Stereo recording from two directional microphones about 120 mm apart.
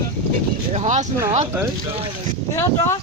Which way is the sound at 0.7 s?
80° right.